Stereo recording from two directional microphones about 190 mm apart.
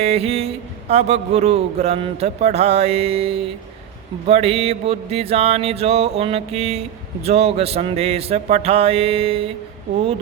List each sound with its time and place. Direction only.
0.0 s speech: 30° right (ahead or behind)